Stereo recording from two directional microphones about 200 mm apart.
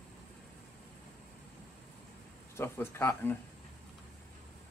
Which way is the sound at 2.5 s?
10° left (ahead or behind).